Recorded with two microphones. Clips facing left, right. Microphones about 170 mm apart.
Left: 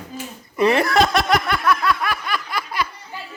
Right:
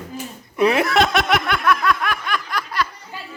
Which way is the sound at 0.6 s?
Centre (ahead or behind).